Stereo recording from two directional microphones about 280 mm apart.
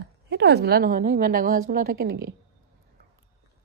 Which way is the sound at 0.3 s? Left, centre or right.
Right.